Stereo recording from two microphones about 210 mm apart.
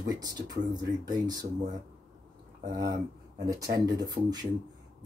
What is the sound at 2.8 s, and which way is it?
Speech, 55° right (ahead or behind).